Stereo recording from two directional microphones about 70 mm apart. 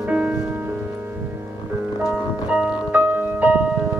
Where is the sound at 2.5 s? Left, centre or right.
Centre.